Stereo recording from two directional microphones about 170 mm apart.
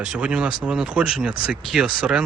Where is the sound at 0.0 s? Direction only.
5° right (ahead or behind).